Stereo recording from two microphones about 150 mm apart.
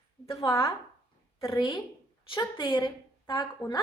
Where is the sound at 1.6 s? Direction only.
30° left (ahead or behind).